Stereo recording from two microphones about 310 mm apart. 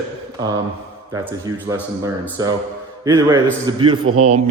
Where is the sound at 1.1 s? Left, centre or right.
Centre.